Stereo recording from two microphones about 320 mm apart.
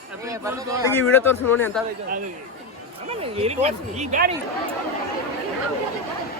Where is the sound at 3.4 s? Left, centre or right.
Centre.